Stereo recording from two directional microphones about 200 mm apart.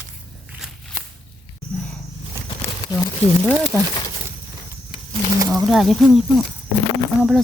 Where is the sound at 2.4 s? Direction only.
15° right (ahead or behind).